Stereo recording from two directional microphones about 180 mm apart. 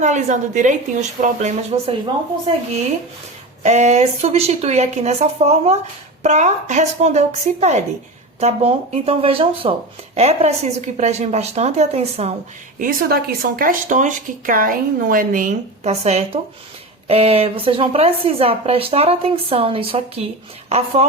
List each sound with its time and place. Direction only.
0.0 s a woman's voice: 40° right (ahead or behind)
12.8 s a woman's voice: 55° right (ahead or behind); by 21.1 s 35° right (ahead or behind)